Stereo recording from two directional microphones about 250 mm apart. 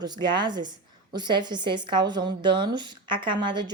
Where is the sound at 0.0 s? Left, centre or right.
Centre.